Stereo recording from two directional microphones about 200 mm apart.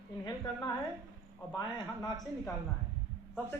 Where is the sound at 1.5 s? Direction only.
20° left (ahead or behind).